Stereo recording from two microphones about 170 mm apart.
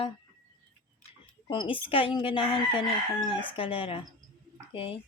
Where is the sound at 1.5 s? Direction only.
30° left (ahead or behind).